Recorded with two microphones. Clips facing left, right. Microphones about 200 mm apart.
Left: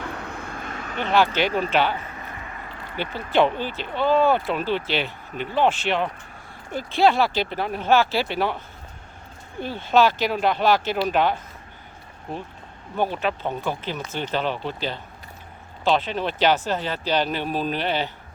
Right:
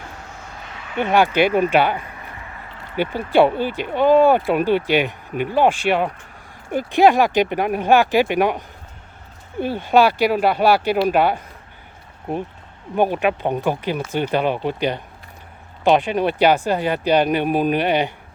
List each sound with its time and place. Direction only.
0.0 s vehicle: 60° left (ahead or behind)
1.0 s speech: 15° right (ahead or behind)
13.0 s speech: 15° right (ahead or behind)